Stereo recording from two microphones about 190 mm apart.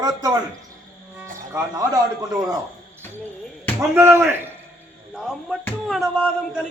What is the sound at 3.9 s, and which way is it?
Speech, 10° right (ahead or behind).